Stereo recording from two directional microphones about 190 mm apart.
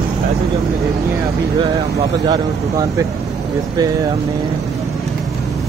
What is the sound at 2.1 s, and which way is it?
Speech, 20° right (ahead or behind).